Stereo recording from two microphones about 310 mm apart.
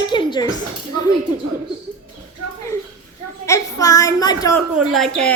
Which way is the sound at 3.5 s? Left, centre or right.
Centre.